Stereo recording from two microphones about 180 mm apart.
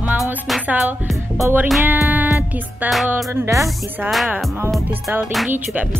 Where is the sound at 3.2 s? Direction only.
15° right (ahead or behind).